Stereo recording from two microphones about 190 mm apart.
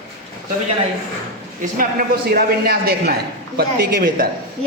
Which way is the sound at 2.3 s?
55° right (ahead or behind).